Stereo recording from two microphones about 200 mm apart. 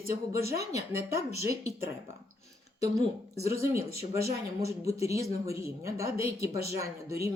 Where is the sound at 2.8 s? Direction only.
15° right (ahead or behind).